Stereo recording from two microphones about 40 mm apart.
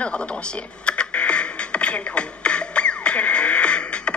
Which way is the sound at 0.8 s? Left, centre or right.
Left.